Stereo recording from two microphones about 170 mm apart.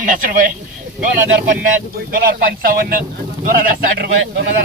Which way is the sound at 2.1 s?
60° right (ahead or behind).